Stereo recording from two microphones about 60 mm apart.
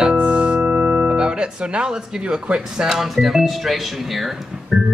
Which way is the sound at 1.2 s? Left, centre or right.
Centre.